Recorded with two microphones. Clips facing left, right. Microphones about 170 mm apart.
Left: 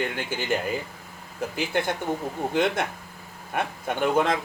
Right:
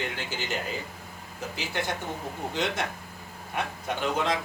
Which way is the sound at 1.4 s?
55° left (ahead or behind).